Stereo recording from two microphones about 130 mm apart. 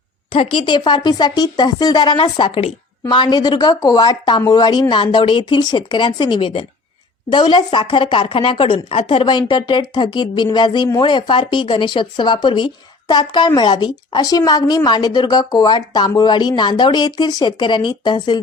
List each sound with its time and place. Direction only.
0.3 s speech: 40° left (ahead or behind)